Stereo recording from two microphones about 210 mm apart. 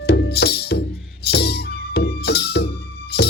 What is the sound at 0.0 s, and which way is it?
Music, 50° left (ahead or behind).